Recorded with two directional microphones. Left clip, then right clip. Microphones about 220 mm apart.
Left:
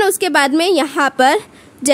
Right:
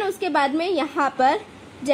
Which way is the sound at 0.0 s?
60° left (ahead or behind).